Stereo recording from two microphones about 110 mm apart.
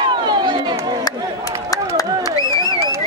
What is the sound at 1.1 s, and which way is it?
Crowd, 40° left (ahead or behind).